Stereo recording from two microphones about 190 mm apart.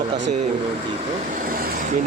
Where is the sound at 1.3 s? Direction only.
45° right (ahead or behind).